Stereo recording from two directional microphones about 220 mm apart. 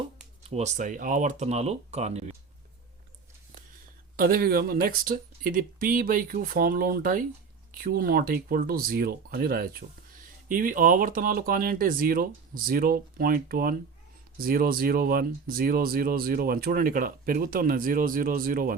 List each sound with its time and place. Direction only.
0.4 s speech: 30° right (ahead or behind)
4.2 s speech: 45° right (ahead or behind)